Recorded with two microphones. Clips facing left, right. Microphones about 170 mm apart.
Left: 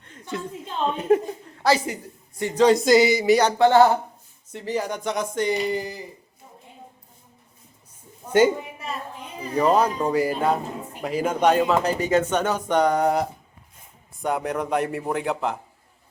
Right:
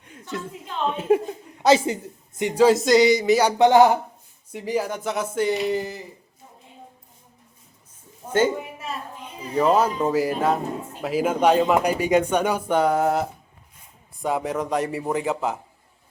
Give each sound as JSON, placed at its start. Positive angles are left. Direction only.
{"t": 0.0, "sound": "a sound", "side_deg": -5}
{"t": 0.9, "sound": "a woman's voice", "side_deg": -10}
{"t": 1.6, "sound": "a woman's voice", "side_deg": -20}
{"t": 2.6, "sound": "speech", "side_deg": -5}
{"t": 3.4, "sound": "speech", "side_deg": -15}
{"t": 9.4, "sound": "speech", "side_deg": 0}